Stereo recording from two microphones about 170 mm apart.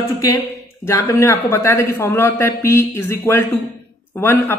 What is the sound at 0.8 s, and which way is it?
A man's voice, 15° left (ahead or behind).